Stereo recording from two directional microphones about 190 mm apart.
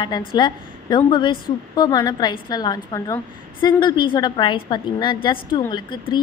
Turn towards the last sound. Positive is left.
turn(degrees=25)  # may be behind; listen again after turning